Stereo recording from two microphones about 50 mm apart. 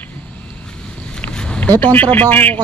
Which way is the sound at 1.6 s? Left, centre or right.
Left.